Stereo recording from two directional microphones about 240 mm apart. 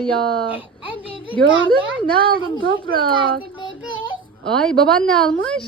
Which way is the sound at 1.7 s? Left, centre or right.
Right.